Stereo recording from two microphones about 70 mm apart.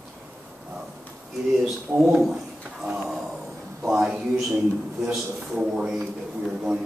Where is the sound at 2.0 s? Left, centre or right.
Centre.